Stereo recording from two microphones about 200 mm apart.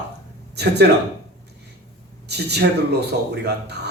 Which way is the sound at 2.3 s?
55° right (ahead or behind).